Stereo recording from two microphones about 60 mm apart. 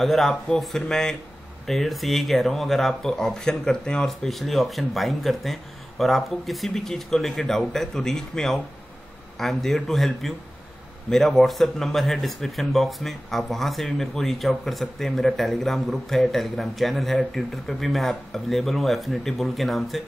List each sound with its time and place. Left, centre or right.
0.0 s speech: centre
4.1 s speech: centre